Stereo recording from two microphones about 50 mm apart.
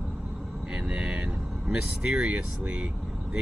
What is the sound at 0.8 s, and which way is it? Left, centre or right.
Vehicle, right.